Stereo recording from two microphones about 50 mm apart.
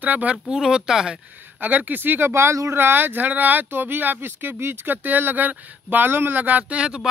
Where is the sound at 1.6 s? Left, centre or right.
Right.